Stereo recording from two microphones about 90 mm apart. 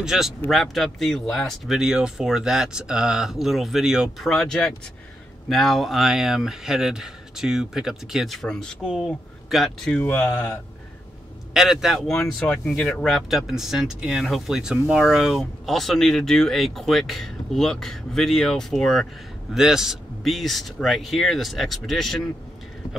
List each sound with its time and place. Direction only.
0.0 s speech: 5° right (ahead or behind)
1.8 s speech: 5° right (ahead or behind)
9.9 s speech: 15° left (ahead or behind)
11.5 s speech: 5° right (ahead or behind)
12.1 s speech: 5° left (ahead or behind)
13.0 s speech: centre (ahead or behind)